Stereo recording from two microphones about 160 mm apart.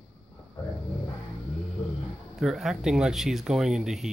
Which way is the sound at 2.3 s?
Centre (ahead or behind).